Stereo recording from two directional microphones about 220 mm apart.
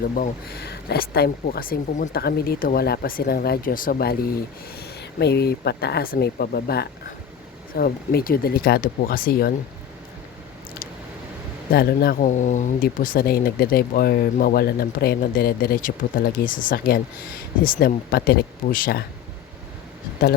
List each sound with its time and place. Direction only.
0.2 s speech: 45° left (ahead or behind)
11.7 s speech: 45° left (ahead or behind)